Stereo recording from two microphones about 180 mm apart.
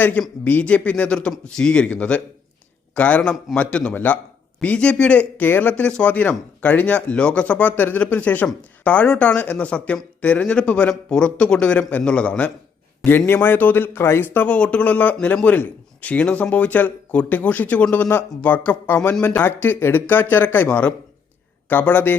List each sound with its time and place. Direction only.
0.0 s speech: 10° left (ahead or behind)